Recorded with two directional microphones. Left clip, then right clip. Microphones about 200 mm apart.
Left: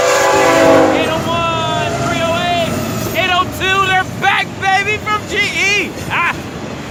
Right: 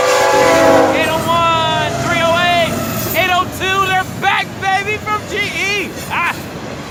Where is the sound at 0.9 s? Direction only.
15° right (ahead or behind).